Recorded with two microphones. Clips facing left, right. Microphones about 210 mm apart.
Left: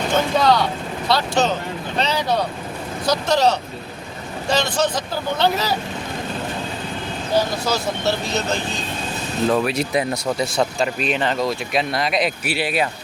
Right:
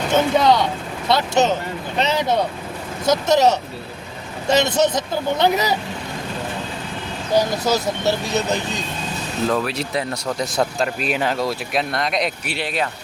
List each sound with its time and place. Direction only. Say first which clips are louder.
0.1 s speech: right 2 dB; 20° right (ahead or behind)
8.0 s speech: right 2 dB; 15° right (ahead or behind)
9.5 s speech: left 4 dB; 10° left (ahead or behind)
10.6 s speech: even; 5° right (ahead or behind)